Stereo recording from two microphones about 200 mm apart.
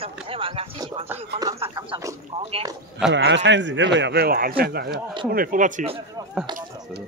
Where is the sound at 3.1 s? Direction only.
65° right (ahead or behind); by 5.9 s 40° right (ahead or behind).